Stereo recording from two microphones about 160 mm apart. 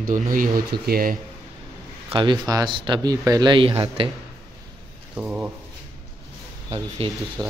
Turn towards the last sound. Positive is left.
turn(degrees=-20)  # may be behind; listen again after turning